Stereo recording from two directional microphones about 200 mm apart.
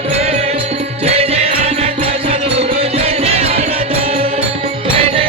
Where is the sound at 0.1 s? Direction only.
30° right (ahead or behind).